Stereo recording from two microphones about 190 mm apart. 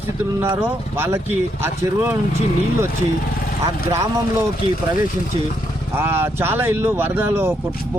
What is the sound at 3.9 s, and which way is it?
Speech, 15° right (ahead or behind).